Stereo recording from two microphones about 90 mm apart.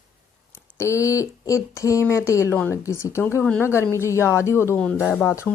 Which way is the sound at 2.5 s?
25° left (ahead or behind).